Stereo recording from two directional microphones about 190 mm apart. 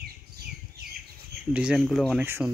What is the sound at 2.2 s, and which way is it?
Speech, 10° right (ahead or behind).